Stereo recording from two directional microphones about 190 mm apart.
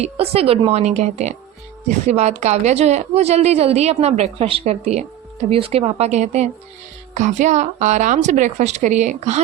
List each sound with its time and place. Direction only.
0.0 s a woman's voice: 30° right (ahead or behind)